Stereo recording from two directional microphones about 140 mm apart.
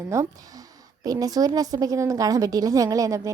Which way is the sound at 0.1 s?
20° right (ahead or behind).